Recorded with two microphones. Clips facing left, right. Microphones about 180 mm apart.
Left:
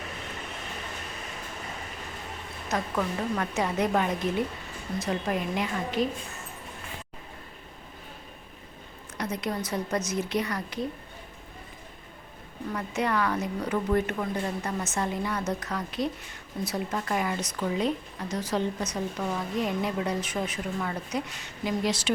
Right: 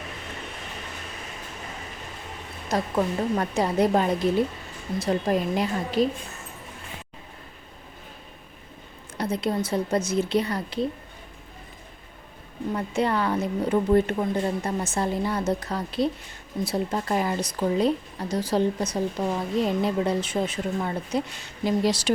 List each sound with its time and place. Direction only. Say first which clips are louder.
2.6 s a woman's voice: right 4 dB; 30° right (ahead or behind)
9.1 s a woman's voice: right 5 dB; 30° right (ahead or behind)
12.7 s a woman's voice: right 3 dB; 30° right (ahead or behind)